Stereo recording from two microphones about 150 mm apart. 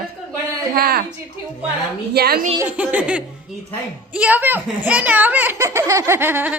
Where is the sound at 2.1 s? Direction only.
90° right.